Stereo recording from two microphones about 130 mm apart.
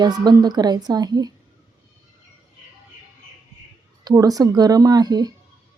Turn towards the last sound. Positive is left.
turn(degrees=-30)  # may be behind; listen again after turning